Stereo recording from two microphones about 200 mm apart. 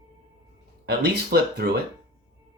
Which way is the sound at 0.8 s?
55° right (ahead or behind).